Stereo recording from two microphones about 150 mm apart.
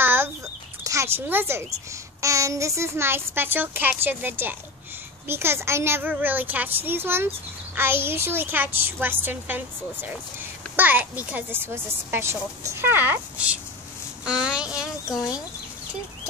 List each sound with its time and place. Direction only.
0.0 s chicken: 15° right (ahead or behind)
0.8 s a child's voice: 20° right (ahead or behind)
10.8 s a child's voice: 10° right (ahead or behind)